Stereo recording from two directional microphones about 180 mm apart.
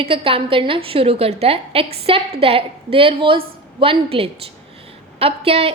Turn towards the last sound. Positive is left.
turn(degrees=-35)  # may be behind; listen again after turning